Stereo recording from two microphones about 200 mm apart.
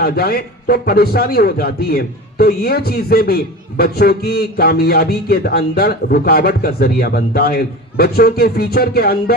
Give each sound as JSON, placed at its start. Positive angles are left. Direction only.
{"t": 0.0, "sound": "a man's voice", "side_deg": 50}